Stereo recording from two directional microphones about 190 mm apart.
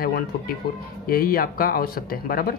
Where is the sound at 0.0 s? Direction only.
50° left (ahead or behind).